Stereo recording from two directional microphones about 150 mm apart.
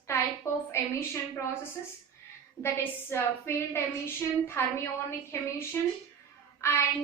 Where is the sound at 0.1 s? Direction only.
20° left (ahead or behind).